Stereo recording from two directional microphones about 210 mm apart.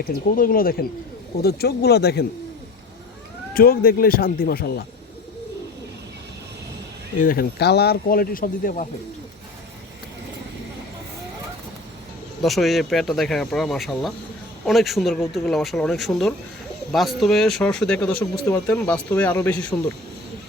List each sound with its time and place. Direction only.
0.0 s speech: 40° left (ahead or behind)
3.5 s speech: 45° left (ahead or behind)
7.2 s speech: 45° left (ahead or behind)
12.4 s speech: centre (ahead or behind)